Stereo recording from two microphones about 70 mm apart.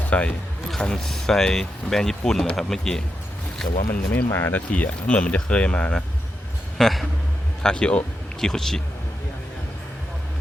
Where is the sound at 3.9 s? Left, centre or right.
Left.